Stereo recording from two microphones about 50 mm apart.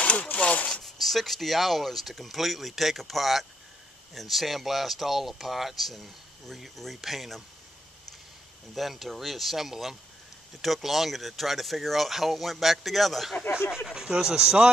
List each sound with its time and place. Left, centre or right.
0.0 s speech: left
0.8 s speech: centre
8.7 s speech: centre
13.8 s speech: centre